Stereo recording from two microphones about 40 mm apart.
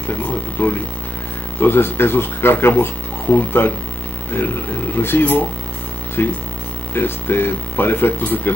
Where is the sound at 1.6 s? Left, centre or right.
Left.